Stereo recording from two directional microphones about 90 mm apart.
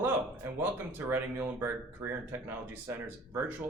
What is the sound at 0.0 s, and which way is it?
Speech, 25° right (ahead or behind).